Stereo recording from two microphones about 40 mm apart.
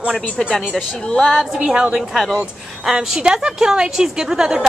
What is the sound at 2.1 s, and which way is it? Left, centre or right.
Speech, centre.